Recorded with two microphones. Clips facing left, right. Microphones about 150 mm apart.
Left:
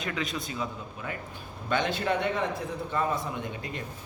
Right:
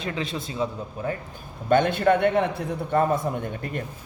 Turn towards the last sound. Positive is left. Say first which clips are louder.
# right 5 dB
turn(degrees=-55)  # may be behind; listen again after turning